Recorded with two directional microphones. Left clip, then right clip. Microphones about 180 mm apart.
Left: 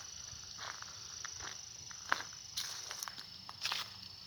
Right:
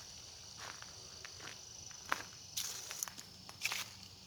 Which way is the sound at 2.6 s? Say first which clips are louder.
Left 1 dB; 20° right (ahead or behind).